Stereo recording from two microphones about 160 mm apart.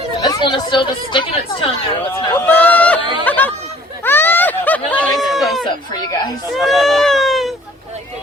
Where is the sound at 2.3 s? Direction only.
10° left (ahead or behind).